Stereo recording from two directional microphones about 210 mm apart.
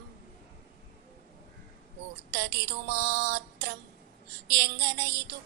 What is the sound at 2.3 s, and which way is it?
Music, 50° right (ahead or behind).